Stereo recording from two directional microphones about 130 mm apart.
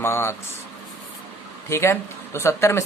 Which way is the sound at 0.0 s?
20° left (ahead or behind).